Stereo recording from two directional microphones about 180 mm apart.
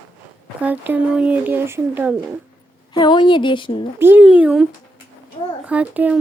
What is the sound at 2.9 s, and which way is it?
Speech, 25° left (ahead or behind).